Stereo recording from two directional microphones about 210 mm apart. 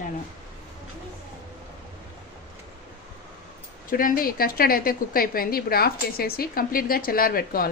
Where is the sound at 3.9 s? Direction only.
40° left (ahead or behind).